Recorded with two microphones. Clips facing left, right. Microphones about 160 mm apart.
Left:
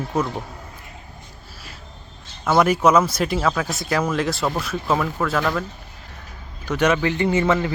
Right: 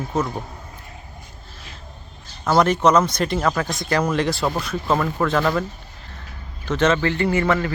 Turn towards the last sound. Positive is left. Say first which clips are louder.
# left 1 dB
turn(degrees=15)  # may be behind; listen again after turning